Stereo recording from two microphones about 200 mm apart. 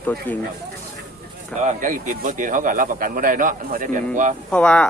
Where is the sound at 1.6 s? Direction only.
40° right (ahead or behind).